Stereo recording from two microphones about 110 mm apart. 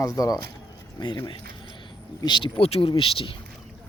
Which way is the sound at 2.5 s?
65° left (ahead or behind).